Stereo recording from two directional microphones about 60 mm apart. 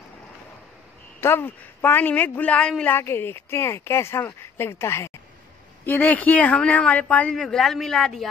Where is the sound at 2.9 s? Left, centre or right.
Left.